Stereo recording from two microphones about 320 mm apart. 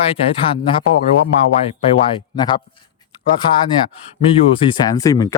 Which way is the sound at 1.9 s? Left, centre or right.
Centre.